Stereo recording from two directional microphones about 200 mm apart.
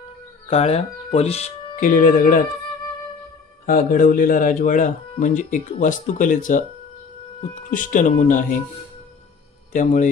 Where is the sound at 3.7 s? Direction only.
45° left (ahead or behind).